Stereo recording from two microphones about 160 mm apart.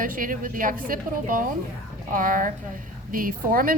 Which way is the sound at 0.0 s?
60° right (ahead or behind).